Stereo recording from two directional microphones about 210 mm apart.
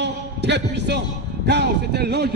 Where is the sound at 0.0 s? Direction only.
55° right (ahead or behind).